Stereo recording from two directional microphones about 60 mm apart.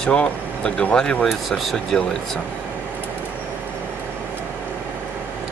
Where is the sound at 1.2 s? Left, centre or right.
Centre.